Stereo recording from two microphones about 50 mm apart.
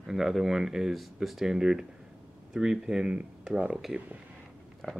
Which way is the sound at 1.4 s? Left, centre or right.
Centre.